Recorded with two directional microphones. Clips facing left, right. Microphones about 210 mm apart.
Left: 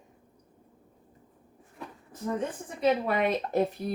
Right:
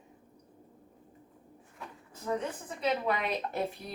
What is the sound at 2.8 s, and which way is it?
A woman's voice, 50° left (ahead or behind).